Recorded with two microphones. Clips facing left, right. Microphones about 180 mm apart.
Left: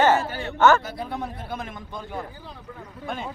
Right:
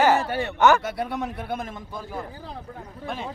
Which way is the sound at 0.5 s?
15° right (ahead or behind).